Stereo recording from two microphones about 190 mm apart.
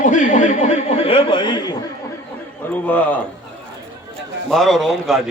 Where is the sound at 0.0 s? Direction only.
40° left (ahead or behind); by 1.7 s 25° left (ahead or behind).